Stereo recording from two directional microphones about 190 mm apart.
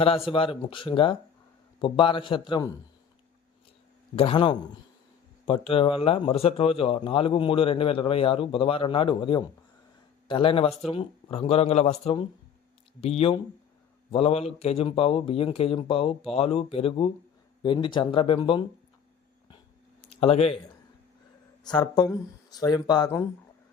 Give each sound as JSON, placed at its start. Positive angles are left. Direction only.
{"t": 0.0, "sound": "speech", "side_deg": 30}
{"t": 4.1, "sound": "speech", "side_deg": 30}
{"t": 20.1, "sound": "speech", "side_deg": 30}
{"t": 21.6, "sound": "speech", "side_deg": 20}